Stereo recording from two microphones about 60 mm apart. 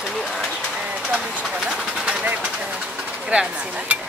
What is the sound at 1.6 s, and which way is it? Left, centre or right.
Vehicle, centre.